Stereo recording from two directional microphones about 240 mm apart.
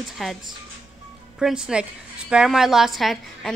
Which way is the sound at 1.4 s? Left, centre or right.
Centre.